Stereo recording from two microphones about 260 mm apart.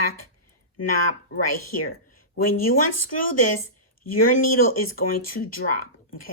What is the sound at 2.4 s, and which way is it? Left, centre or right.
Speech, left.